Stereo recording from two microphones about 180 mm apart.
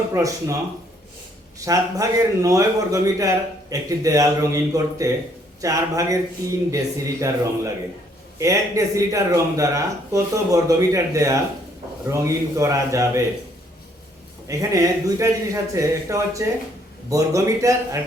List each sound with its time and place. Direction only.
0.1 s speech: 20° right (ahead or behind)
1.5 s a man's voice: 20° right (ahead or behind)
14.4 s speech: 20° right (ahead or behind)